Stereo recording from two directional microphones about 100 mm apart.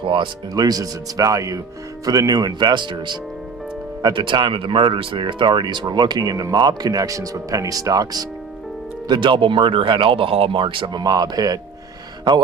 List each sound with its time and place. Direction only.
0.5 s speech: 40° right (ahead or behind)
9.0 s speech: 55° right (ahead or behind); by 11.6 s 35° right (ahead or behind)